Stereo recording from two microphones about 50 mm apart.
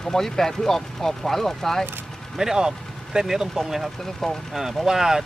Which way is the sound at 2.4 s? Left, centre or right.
Centre.